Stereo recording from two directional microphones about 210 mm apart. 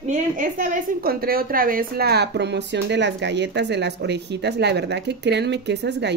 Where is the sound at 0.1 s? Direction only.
40° right (ahead or behind).